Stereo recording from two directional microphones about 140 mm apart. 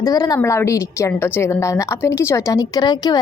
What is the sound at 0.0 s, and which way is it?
A woman's voice, 25° left (ahead or behind).